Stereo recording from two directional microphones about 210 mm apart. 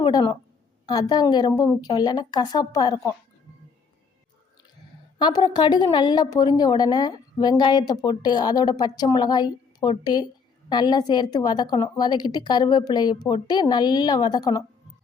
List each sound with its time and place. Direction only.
0.0 s a woman's voice: 20° left (ahead or behind)
5.2 s a woman's voice: 20° left (ahead or behind)